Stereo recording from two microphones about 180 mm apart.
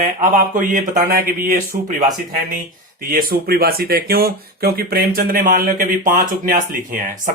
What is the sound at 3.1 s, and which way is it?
Speech, 55° right (ahead or behind).